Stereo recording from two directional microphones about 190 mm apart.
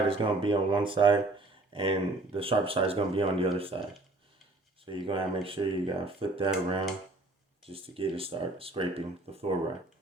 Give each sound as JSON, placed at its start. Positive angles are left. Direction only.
{"t": 0.1, "sound": "speech", "side_deg": -30}
{"t": 5.0, "sound": "speech", "side_deg": -30}